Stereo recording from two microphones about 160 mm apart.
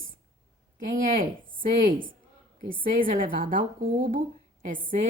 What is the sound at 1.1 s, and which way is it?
A woman's voice, 60° right (ahead or behind).